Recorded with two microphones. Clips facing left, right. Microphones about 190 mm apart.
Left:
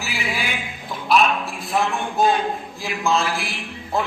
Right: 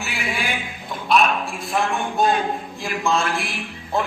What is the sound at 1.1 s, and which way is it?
A man's voice, centre (ahead or behind).